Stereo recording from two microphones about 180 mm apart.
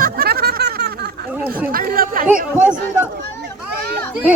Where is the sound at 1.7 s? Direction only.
50° right (ahead or behind).